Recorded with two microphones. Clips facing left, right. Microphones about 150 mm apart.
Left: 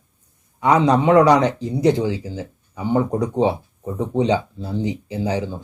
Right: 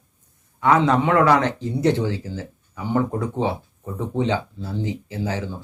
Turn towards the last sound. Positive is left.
turn(degrees=15)  # may be behind; listen again after turning